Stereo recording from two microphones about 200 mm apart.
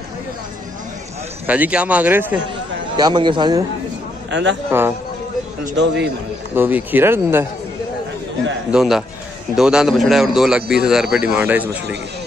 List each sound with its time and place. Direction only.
1.5 s speech: 5° right (ahead or behind)
3.0 s a man's voice: 20° right (ahead or behind)
4.3 s speech: 65° right (ahead or behind)
4.6 s speech: 10° right (ahead or behind)
6.5 s speech: 10° right (ahead or behind)
8.7 s a man's voice: centre (ahead or behind)